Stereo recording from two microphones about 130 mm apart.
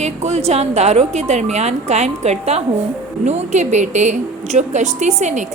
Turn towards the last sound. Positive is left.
turn(degrees=-65)  # may be behind; listen again after turning